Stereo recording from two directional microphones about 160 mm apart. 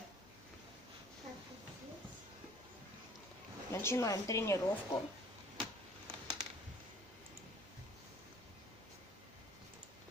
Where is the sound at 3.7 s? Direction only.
15° left (ahead or behind).